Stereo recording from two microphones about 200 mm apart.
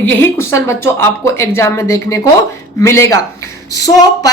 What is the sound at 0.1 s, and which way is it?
A woman's voice, 10° left (ahead or behind).